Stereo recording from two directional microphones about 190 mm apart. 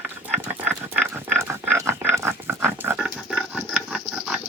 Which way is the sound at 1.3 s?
10° right (ahead or behind).